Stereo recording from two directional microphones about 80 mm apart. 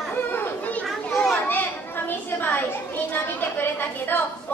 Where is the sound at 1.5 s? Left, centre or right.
Left.